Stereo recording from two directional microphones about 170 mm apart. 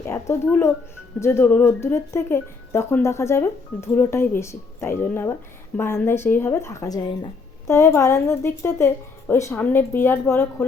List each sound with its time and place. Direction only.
0.1 s speech: 15° left (ahead or behind)